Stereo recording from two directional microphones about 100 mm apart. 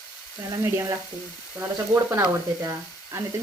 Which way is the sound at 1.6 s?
30° right (ahead or behind).